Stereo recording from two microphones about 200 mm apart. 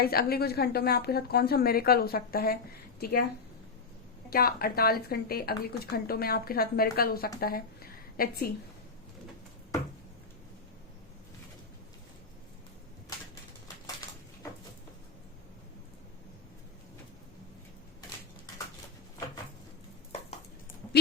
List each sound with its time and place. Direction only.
0.0 s a woman's voice: 50° left (ahead or behind)
4.3 s a woman's voice: 50° left (ahead or behind)